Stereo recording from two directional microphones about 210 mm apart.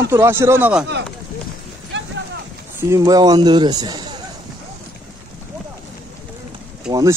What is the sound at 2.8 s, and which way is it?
A man's voice, 15° right (ahead or behind).